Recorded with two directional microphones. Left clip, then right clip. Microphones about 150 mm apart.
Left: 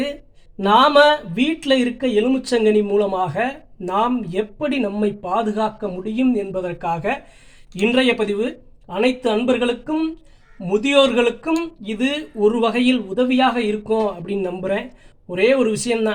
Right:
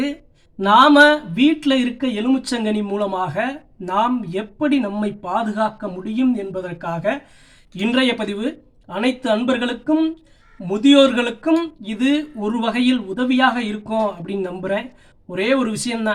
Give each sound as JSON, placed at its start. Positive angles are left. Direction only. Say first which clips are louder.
{"t": 0.6, "sound": "speech", "louder": "right 2 dB", "side_deg": 25}